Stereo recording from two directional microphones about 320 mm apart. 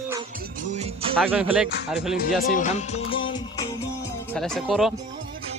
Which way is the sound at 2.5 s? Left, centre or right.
Left.